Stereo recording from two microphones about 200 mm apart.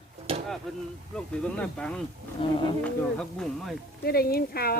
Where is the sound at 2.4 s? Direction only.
25° left (ahead or behind).